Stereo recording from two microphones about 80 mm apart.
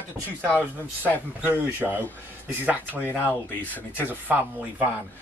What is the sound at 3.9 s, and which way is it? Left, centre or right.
Speech, right.